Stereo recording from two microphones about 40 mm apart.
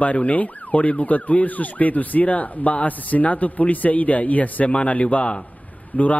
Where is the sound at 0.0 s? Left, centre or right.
Left.